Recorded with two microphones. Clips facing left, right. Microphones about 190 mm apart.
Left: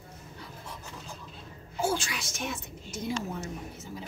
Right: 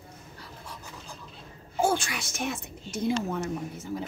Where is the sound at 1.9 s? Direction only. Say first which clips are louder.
Right 3 dB; 55° right (ahead or behind).